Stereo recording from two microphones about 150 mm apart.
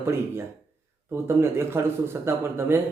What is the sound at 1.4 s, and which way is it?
A man's voice, 15° right (ahead or behind).